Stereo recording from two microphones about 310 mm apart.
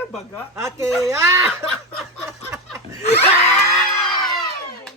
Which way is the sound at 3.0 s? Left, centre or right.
Left.